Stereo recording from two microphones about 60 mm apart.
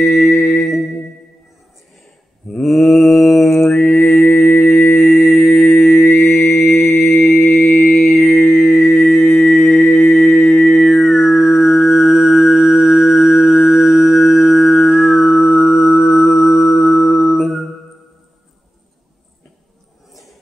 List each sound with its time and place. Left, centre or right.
0.4 s music: centre
2.6 s mantra: centre
4.6 s mantra: left
5.4 s music: centre
6.3 s mantra: centre
9.4 s music: centre
12.9 s mantra: centre
14.2 s music: centre